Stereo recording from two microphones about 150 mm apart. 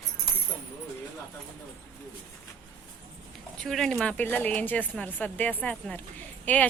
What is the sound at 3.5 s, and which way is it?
Speech, 5° left (ahead or behind).